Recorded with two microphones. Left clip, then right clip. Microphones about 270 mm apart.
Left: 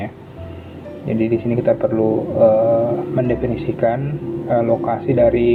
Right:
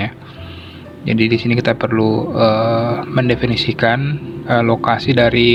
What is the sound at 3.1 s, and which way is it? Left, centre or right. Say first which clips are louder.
Speech: right 3 dB; right.